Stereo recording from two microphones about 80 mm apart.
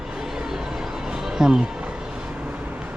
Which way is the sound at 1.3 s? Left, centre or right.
Centre.